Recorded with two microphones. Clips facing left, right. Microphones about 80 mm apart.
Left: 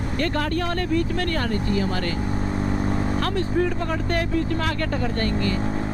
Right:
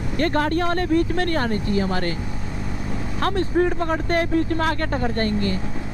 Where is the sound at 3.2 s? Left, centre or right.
Right.